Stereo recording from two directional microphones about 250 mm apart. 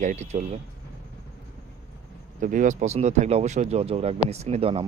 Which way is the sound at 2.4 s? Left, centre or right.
Right.